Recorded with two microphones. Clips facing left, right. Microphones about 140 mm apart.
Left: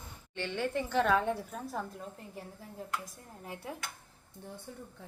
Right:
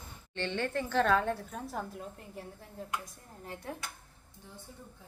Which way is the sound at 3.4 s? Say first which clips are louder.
Right 1 dB; 10° left (ahead or behind).